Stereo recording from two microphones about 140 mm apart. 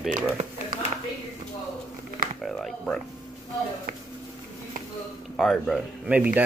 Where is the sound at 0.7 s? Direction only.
90° right.